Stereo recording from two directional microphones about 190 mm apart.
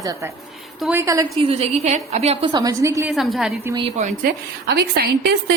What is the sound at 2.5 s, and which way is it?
Speech, 20° right (ahead or behind).